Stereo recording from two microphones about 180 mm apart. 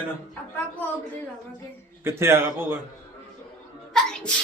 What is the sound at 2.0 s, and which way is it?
Speech, 15° right (ahead or behind).